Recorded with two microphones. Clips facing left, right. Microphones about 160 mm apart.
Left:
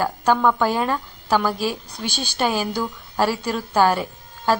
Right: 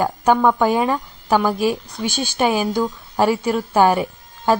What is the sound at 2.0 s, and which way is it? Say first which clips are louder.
Speech: right 3 dB; centre (ahead or behind).